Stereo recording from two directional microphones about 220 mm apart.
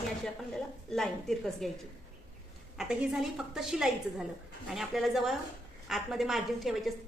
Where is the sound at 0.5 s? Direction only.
Centre (ahead or behind).